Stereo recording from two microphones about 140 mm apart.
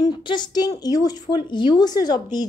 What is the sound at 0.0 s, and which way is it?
A woman's voice, 30° left (ahead or behind).